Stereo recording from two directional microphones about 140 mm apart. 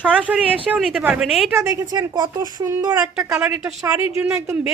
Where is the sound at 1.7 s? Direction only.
25° right (ahead or behind).